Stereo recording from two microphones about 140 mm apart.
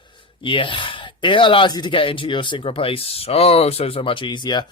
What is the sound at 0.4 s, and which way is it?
Speech, 35° left (ahead or behind).